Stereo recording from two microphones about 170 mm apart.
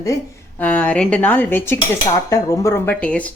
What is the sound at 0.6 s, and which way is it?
Speech, 5° left (ahead or behind).